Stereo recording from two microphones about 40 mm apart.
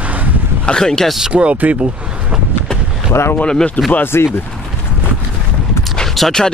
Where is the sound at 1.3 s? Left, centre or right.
Right.